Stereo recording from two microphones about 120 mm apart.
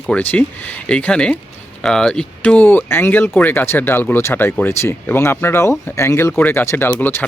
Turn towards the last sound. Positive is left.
turn(degrees=15)  # may be behind; listen again after turning